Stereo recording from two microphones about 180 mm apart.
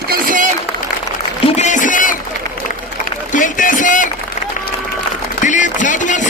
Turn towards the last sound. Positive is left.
turn(degrees=45)  # may be behind; listen again after turning